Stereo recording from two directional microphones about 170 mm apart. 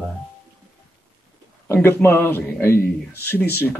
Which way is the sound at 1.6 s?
15° left (ahead or behind).